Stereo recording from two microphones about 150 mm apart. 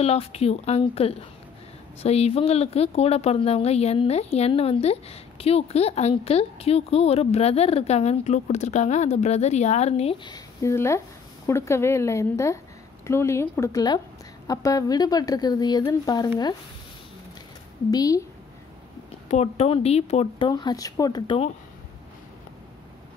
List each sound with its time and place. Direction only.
0.0 s a woman's voice: 45° left (ahead or behind); by 16.5 s 25° left (ahead or behind)
17.9 s a woman's voice: 25° left (ahead or behind)
19.2 s a woman's voice: 45° left (ahead or behind)
20.4 s a woman's voice: 25° left (ahead or behind)